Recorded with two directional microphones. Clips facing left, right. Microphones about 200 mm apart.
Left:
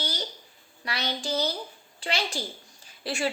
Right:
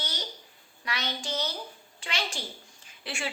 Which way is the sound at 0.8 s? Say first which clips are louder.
Left 3 dB; 35° left (ahead or behind).